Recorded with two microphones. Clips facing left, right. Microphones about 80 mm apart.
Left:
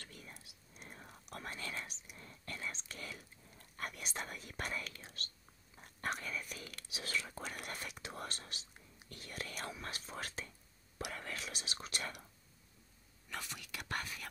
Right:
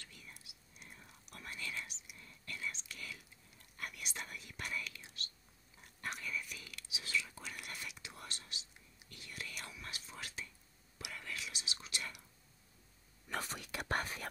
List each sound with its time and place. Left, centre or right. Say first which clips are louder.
0.0 s whispering: left 3 dB; left
5.9 s speech: left 2 dB; left
13.3 s speech: right 4 dB; right